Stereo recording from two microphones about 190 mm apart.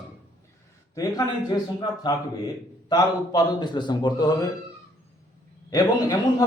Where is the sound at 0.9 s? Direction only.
20° left (ahead or behind).